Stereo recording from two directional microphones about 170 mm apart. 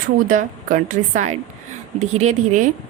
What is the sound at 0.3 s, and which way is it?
A woman's voice, 50° right (ahead or behind).